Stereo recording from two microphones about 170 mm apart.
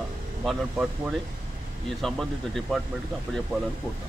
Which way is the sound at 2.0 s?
Centre (ahead or behind).